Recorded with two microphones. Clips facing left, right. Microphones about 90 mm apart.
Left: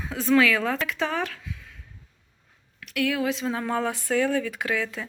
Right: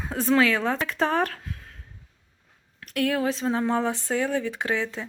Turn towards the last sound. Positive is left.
turn(degrees=-25)  # may be behind; listen again after turning